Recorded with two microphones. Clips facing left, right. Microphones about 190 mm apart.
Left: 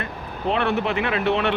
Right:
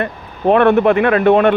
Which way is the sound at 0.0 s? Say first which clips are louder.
Right 9 dB; 55° right (ahead or behind).